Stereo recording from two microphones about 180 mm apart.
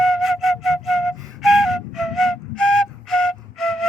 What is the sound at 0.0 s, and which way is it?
Flute, centre (ahead or behind).